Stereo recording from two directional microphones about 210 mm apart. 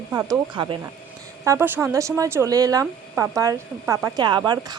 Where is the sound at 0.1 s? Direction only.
15° right (ahead or behind).